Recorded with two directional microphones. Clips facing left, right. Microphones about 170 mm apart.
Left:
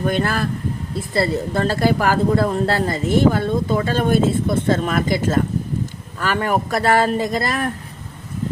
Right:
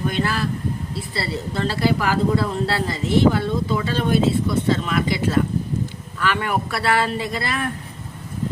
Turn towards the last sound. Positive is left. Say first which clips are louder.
# left 4 dB
turn(degrees=40)  # may be behind; listen again after turning